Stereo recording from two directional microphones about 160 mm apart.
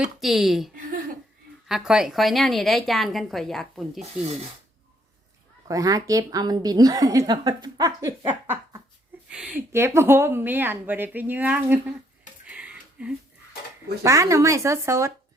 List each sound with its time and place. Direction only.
0.0 s a woman's voice: centre (ahead or behind)
5.6 s a woman's voice: 20° right (ahead or behind)
8.3 s laughter: 10° right (ahead or behind)
9.3 s a woman's voice: 5° right (ahead or behind)
12.5 s a sound: 10° right (ahead or behind)
14.0 s a woman's voice: 20° right (ahead or behind)